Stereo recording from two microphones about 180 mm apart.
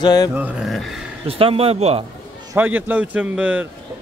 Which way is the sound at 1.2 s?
30° right (ahead or behind).